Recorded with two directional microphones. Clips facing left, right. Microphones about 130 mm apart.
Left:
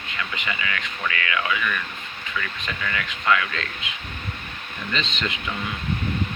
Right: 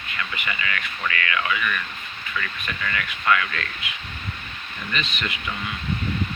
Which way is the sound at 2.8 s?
15° left (ahead or behind).